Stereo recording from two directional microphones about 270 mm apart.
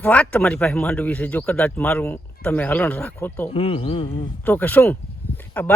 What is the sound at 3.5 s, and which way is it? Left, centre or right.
Speech, left.